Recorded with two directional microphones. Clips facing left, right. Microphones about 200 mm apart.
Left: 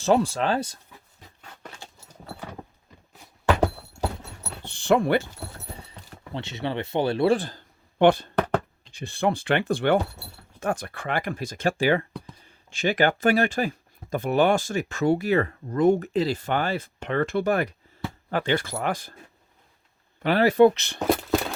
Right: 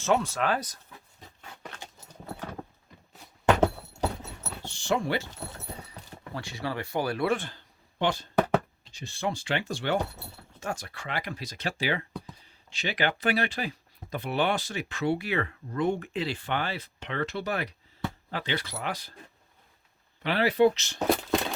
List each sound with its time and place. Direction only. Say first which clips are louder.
0.0 s speech: left 5 dB; 30° left (ahead or behind)
4.6 s keys jangling: left 7 dB; 60° left (ahead or behind)
6.3 s speech: left 4 dB; 25° left (ahead or behind)
7.9 s speech: left 10 dB; 55° left (ahead or behind)
8.4 s a sound: even; 5° right (ahead or behind)
8.9 s speech: left 7 dB; 55° left (ahead or behind)
20.2 s speech: left 5 dB; 45° left (ahead or behind)
21.1 s a sound: left 3 dB; centre (ahead or behind)